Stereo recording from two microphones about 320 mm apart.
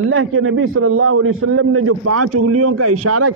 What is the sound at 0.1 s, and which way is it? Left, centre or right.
A man's voice, right.